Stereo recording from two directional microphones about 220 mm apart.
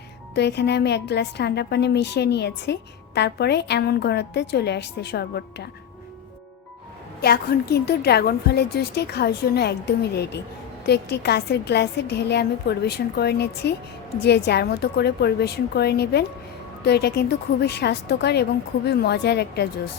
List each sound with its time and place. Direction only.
0.3 s a woman's voice: 50° left (ahead or behind)
7.2 s a woman's voice: 45° left (ahead or behind)